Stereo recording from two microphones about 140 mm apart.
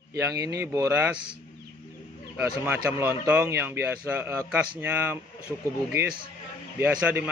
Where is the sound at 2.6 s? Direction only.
15° right (ahead or behind).